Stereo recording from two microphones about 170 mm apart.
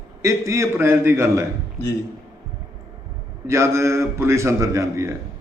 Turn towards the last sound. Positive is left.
turn(degrees=-15)  # may be behind; listen again after turning